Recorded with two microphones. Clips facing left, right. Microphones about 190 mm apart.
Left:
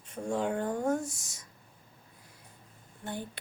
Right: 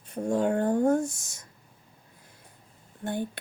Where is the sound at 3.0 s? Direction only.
55° right (ahead or behind).